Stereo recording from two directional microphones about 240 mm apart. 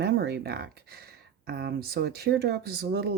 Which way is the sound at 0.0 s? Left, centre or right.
Right.